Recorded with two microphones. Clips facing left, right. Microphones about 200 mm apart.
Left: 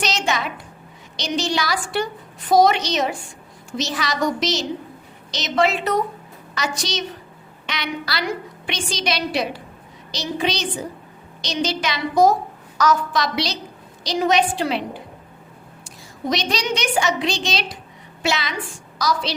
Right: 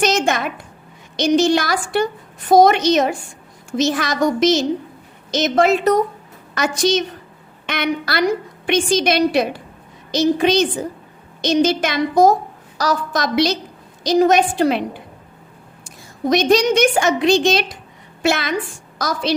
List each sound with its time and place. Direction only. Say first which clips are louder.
0.0 s a woman's voice: right 6 dB; 50° right (ahead or behind)
12.7 s a woman's voice: left 1 dB; 35° right (ahead or behind)
13.2 s a woman's voice: right 7 dB; 50° right (ahead or behind)
16.3 s a woman's voice: right 9 dB; 50° right (ahead or behind)